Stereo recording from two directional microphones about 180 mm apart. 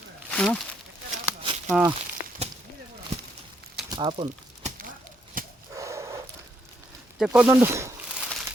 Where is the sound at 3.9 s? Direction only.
25° right (ahead or behind).